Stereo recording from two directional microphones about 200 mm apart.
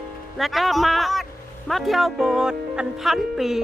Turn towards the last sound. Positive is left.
turn(degrees=0)  # may be behind; listen again after turning